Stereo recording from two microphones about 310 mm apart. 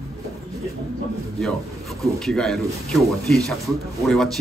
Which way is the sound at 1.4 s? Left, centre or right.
Centre.